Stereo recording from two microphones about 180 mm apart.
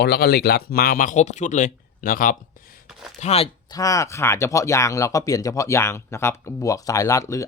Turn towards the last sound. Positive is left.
turn(degrees=20)  # may be behind; listen again after turning